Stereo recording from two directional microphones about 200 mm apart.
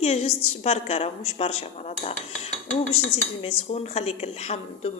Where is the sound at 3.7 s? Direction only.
30° left (ahead or behind).